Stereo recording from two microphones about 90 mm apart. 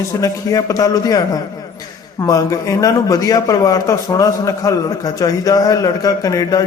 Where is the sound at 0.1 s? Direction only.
40° left (ahead or behind).